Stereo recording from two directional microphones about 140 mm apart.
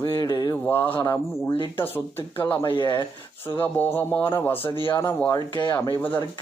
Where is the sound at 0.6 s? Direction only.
15° left (ahead or behind).